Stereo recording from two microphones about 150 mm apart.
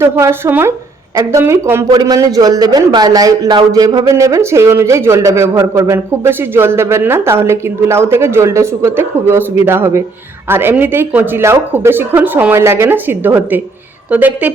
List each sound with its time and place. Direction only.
0.0 s a man's voice: 15° right (ahead or behind)